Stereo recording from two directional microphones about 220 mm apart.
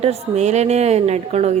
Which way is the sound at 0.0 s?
30° right (ahead or behind).